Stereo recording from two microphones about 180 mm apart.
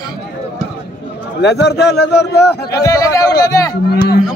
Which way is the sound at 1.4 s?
70° left (ahead or behind).